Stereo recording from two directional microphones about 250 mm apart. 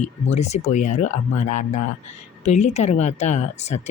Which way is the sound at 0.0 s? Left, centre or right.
Left.